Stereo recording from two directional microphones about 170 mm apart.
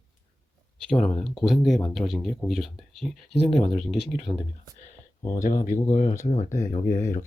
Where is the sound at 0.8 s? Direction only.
5° left (ahead or behind).